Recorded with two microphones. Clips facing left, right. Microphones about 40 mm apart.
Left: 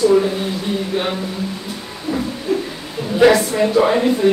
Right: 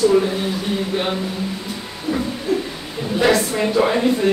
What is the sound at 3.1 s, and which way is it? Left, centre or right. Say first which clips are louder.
Speech: left 5 dB; centre.